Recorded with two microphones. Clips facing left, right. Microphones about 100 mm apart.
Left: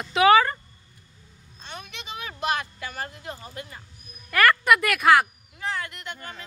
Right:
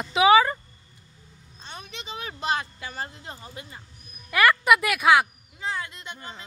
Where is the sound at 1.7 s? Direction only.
30° right (ahead or behind).